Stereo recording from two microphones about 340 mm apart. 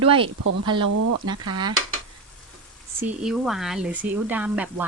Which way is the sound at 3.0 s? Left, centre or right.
Centre.